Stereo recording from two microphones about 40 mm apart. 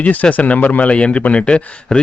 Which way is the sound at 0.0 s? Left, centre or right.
Left.